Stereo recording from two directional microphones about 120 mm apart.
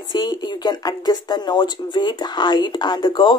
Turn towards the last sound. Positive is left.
turn(degrees=40)  # may be behind; listen again after turning